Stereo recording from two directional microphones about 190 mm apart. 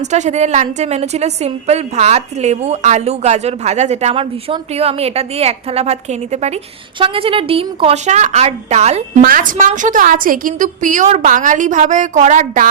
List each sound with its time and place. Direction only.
0.0 s a woman's voice: 40° right (ahead or behind)
9.2 s a woman's voice: 45° right (ahead or behind)